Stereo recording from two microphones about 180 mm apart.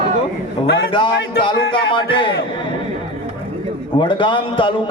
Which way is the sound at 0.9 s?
25° left (ahead or behind).